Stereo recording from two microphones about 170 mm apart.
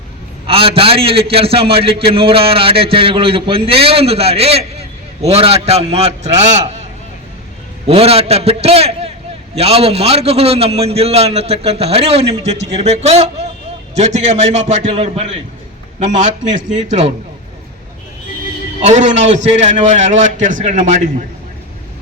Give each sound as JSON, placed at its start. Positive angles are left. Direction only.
{"t": 0.4, "sound": "a man's voice", "side_deg": -35}
{"t": 7.9, "sound": "a man's voice", "side_deg": -35}
{"t": 18.8, "sound": "a man's voice", "side_deg": -45}